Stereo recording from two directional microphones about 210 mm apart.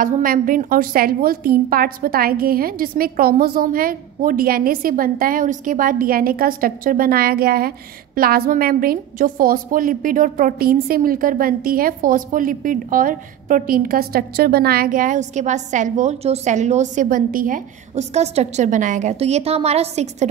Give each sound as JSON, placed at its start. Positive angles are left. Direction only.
{"t": 0.0, "sound": "a woman's voice", "side_deg": -40}